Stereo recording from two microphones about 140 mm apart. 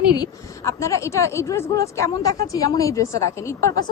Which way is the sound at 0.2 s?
20° left (ahead or behind).